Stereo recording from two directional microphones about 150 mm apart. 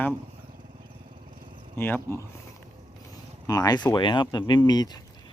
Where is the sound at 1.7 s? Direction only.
15° left (ahead or behind).